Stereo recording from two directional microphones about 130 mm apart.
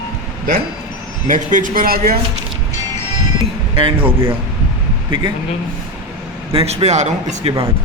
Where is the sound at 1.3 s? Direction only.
85° right.